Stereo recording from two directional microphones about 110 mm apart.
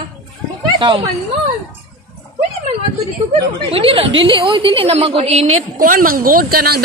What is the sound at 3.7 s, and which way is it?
A woman's voice, 60° right (ahead or behind).